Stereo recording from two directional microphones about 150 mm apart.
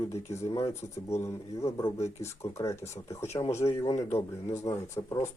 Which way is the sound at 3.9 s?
45° left (ahead or behind).